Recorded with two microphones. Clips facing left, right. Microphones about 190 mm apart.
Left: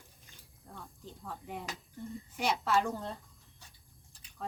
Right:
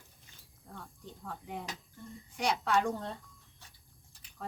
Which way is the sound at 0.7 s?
5° left (ahead or behind).